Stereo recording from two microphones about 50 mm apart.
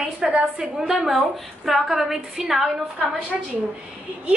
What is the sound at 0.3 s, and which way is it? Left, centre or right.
Speech, right.